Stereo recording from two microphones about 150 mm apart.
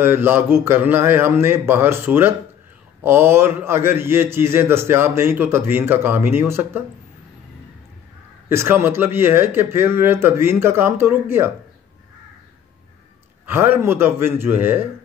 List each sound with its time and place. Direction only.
0.0 s a man's voice: 15° right (ahead or behind)
8.5 s a man's voice: 15° right (ahead or behind)
13.5 s a man's voice: 15° right (ahead or behind)